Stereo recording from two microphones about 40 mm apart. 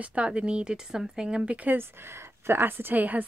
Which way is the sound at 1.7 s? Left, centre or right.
Right.